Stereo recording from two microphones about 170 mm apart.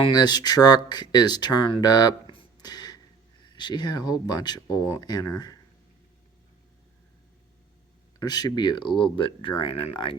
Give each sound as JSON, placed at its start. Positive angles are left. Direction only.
{"t": 0.0, "sound": "speech", "side_deg": 25}
{"t": 8.2, "sound": "speech", "side_deg": 25}